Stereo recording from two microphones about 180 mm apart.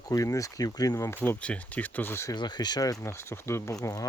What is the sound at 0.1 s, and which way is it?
Speech, 20° left (ahead or behind).